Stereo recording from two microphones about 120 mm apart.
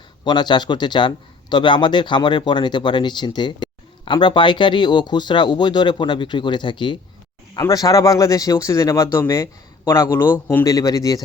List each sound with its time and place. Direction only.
0.3 s speech: 40° left (ahead or behind)
7.5 s speech: 30° left (ahead or behind)